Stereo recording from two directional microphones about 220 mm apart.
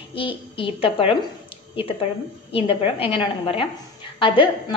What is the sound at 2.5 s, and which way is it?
A woman's voice, 25° left (ahead or behind).